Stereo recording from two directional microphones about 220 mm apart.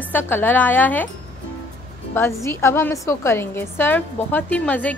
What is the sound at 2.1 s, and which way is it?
A woman's voice, 10° left (ahead or behind).